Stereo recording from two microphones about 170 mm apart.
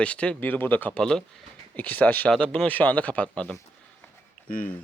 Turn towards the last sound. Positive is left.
turn(degrees=55)  # may be behind; listen again after turning